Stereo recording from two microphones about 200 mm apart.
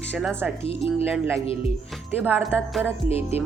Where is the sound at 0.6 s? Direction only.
30° left (ahead or behind).